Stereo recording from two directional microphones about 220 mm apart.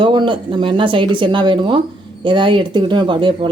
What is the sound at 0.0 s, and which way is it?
Speech, 20° right (ahead or behind).